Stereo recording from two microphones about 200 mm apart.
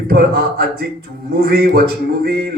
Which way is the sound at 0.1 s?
50° right (ahead or behind).